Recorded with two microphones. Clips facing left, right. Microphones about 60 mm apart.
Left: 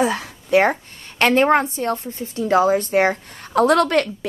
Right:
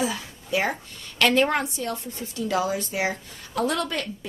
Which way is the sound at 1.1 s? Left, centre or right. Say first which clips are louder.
Left 6 dB; left.